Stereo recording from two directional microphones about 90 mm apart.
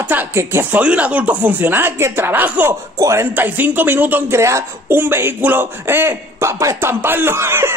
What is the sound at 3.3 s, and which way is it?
Speech, 20° right (ahead or behind).